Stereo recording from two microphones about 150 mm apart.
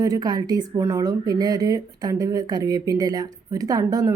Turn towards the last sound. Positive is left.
turn(degrees=-25)  # may be behind; listen again after turning